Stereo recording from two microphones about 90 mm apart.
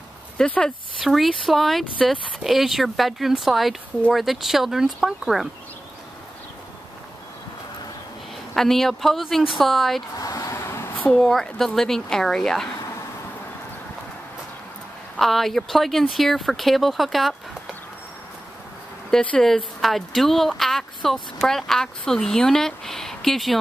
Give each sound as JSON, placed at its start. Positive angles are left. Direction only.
{"t": 0.5, "sound": "speech", "side_deg": 10}
{"t": 1.0, "sound": "speech", "side_deg": 0}
{"t": 8.5, "sound": "speech", "side_deg": 5}
{"t": 10.1, "sound": "a sound", "side_deg": 40}
{"t": 10.5, "sound": "a sound", "side_deg": 30}
{"t": 11.1, "sound": "speech", "side_deg": 5}
{"t": 15.1, "sound": "speech", "side_deg": 0}
{"t": 19.0, "sound": "speech", "side_deg": 5}